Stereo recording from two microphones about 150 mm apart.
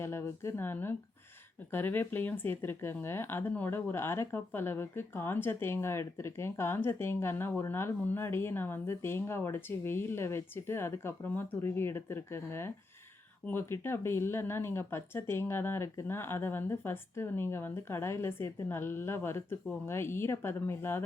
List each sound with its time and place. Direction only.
0.0 s speech: 15° left (ahead or behind)